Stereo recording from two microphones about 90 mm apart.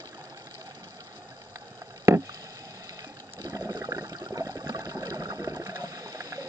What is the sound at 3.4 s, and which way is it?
Water, 40° right (ahead or behind).